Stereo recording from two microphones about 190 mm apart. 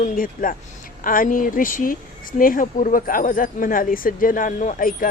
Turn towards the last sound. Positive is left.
turn(degrees=45)  # may be behind; listen again after turning